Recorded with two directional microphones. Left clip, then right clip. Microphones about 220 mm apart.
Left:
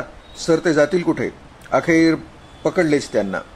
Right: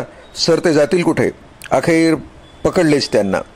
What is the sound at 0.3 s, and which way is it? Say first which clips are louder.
A man's voice: right 4 dB; 40° right (ahead or behind).